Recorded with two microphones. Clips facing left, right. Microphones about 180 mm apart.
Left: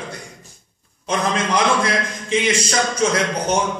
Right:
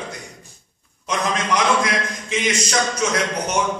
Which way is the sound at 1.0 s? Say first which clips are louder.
Left 2 dB; 30° left (ahead or behind).